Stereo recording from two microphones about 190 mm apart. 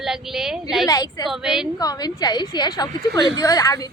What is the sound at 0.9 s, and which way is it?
Speech, 20° left (ahead or behind).